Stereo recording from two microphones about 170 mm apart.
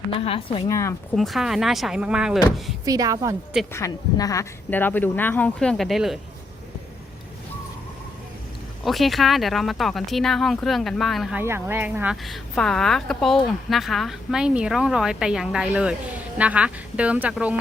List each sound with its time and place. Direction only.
0.3 s a woman's voice: 35° left (ahead or behind)
0.7 s speech: 15° left (ahead or behind)
1.1 s speech: centre (ahead or behind)
2.8 s a woman's voice: 20° right (ahead or behind)
3.7 s speech: 15° left (ahead or behind); by 6.1 s centre (ahead or behind)
8.8 s speech: centre (ahead or behind)
11.3 s speech: 15° right (ahead or behind)
12.1 s speech: centre (ahead or behind)